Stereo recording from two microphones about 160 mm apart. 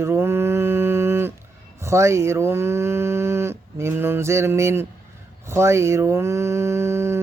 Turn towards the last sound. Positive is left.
turn(degrees=-15)  # may be behind; listen again after turning